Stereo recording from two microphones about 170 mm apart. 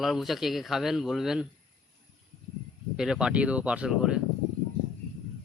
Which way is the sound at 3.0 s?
5° right (ahead or behind).